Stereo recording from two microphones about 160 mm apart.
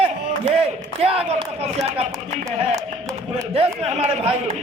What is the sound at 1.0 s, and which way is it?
Speech, 40° right (ahead or behind).